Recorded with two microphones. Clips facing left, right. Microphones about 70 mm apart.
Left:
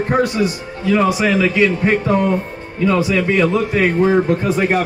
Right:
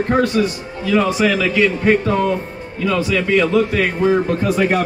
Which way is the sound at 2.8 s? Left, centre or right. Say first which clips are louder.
Left 2 dB; left.